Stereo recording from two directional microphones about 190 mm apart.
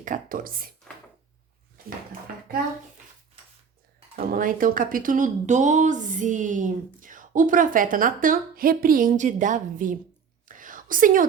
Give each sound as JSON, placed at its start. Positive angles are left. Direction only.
{"t": 0.0, "sound": "speech", "side_deg": -45}
{"t": 4.1, "sound": "speech", "side_deg": -45}
{"t": 10.5, "sound": "whispering", "side_deg": -45}